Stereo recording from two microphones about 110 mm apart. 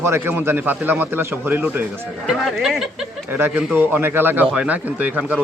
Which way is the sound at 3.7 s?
20° right (ahead or behind).